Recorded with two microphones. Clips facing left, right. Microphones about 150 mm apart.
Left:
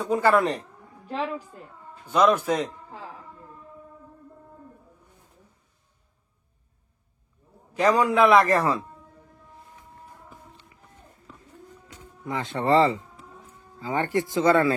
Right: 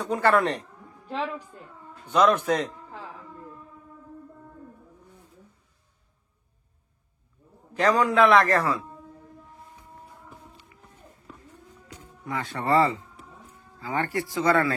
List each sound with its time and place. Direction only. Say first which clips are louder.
0.1 s a woman's voice: left 1 dB; centre (ahead or behind)
7.8 s a man's voice: left 1 dB; 10° left (ahead or behind)
12.3 s speech: left 3 dB; 20° left (ahead or behind)